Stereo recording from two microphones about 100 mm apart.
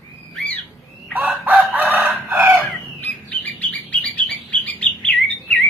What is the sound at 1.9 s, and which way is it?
Chicken, 15° right (ahead or behind).